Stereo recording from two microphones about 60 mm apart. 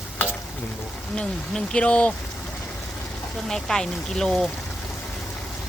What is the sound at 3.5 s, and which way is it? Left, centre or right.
Speech, centre.